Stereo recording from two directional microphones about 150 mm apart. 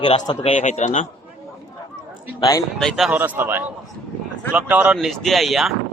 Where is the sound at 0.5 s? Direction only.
50° left (ahead or behind).